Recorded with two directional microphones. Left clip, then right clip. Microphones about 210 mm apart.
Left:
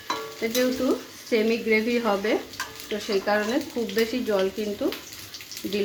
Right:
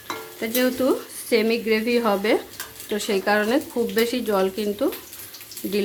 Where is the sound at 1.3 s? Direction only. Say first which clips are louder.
Right 2 dB; 30° right (ahead or behind).